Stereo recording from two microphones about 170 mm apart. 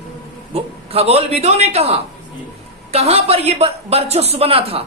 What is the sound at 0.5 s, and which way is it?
A man's voice, 35° right (ahead or behind).